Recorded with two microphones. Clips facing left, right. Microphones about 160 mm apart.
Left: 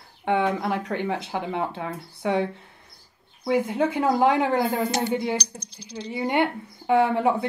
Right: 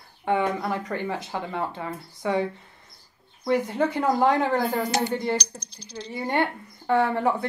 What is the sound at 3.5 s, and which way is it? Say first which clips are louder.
Speech: left 1 dB; 10° left (ahead or behind).